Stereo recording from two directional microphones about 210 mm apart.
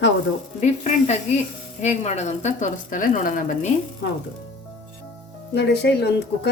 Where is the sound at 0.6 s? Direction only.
35° left (ahead or behind).